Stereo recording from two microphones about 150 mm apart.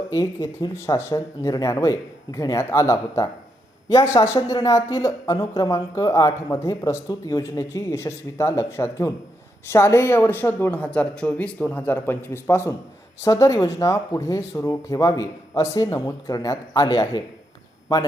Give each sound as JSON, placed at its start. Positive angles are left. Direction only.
{"t": 0.1, "sound": "speech", "side_deg": 20}